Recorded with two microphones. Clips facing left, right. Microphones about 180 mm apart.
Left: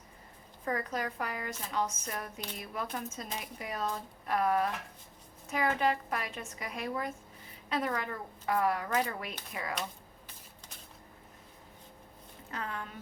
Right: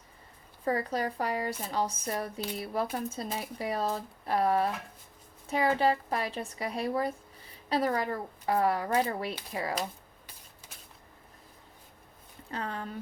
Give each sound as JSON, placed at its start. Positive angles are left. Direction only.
{"t": 0.6, "sound": "speech", "side_deg": -30}
{"t": 12.5, "sound": "speech", "side_deg": -30}